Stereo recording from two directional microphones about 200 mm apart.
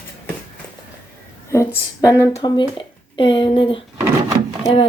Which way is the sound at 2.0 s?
15° left (ahead or behind).